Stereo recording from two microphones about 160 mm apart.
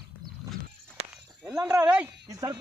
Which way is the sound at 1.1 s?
5° right (ahead or behind).